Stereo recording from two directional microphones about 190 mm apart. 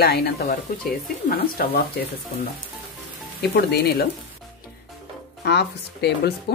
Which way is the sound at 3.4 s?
60° left (ahead or behind).